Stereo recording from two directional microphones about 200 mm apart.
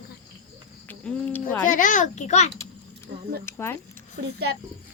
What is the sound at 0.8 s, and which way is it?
Cricket, 10° left (ahead or behind).